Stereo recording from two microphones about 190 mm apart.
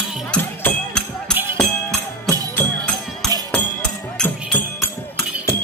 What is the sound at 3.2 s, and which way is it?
Music, 20° left (ahead or behind).